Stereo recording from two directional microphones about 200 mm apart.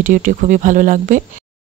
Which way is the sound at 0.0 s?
40° right (ahead or behind).